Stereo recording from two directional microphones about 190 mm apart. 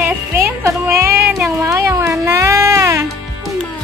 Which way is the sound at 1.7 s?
15° right (ahead or behind).